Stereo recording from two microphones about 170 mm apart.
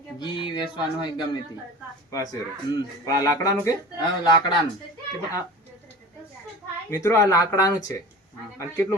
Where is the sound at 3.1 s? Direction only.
20° left (ahead or behind).